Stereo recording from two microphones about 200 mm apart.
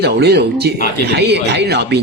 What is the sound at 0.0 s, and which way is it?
Speech, 55° right (ahead or behind).